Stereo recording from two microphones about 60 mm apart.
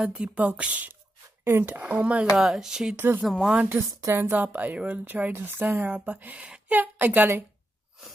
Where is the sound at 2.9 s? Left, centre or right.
Right.